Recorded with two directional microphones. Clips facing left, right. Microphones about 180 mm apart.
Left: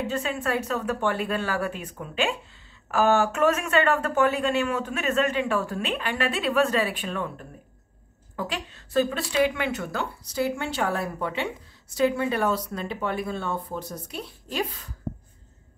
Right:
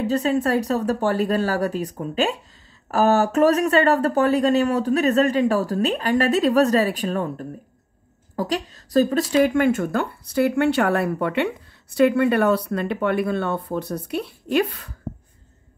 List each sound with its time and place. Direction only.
0.0 s speech: 40° right (ahead or behind); by 14.9 s 65° right (ahead or behind)